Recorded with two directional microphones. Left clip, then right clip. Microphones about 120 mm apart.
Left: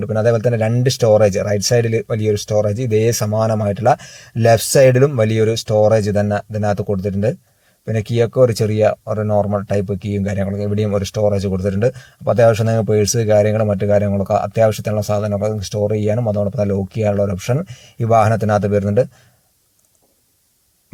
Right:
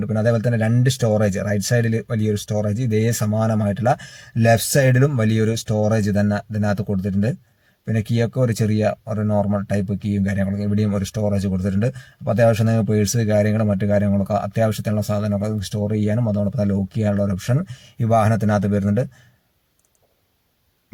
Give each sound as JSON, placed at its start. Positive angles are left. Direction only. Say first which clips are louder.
{"t": 0.0, "sound": "speech", "louder": "left 5 dB", "side_deg": 25}